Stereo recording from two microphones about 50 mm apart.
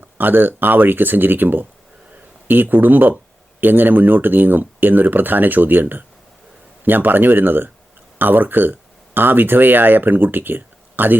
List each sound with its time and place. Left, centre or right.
0.2 s speech: right